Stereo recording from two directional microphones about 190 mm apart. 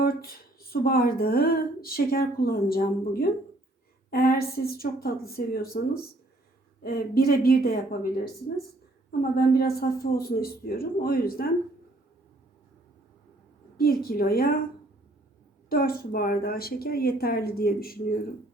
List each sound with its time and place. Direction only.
0.0 s speech: 50° left (ahead or behind)
6.8 s speech: 55° left (ahead or behind)
13.7 s speech: 50° left (ahead or behind)
15.7 s speech: 50° left (ahead or behind)